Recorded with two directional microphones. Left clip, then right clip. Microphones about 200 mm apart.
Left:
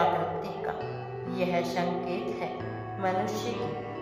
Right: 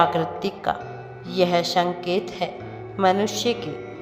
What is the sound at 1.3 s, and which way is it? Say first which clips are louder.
Speech: right 9 dB; 35° right (ahead or behind).